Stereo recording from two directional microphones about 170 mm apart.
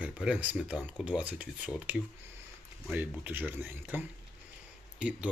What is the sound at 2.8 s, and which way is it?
Speech, 10° right (ahead or behind).